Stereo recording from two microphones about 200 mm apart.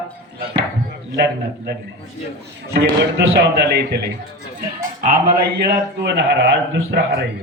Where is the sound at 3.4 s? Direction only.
55° right (ahead or behind).